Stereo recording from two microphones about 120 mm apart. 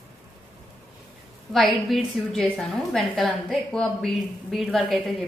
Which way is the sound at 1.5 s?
Centre (ahead or behind).